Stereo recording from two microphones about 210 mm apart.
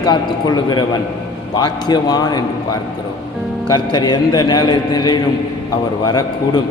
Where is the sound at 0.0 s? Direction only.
20° left (ahead or behind).